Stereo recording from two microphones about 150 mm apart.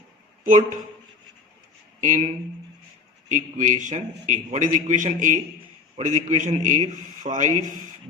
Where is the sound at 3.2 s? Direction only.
55° right (ahead or behind).